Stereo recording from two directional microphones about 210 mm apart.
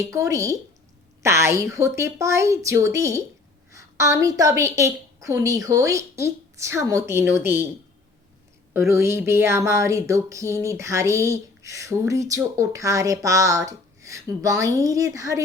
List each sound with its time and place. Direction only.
0.0 s speech: 15° right (ahead or behind)
8.7 s speech: 10° right (ahead or behind)